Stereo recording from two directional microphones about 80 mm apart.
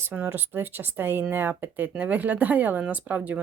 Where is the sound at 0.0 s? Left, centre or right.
Right.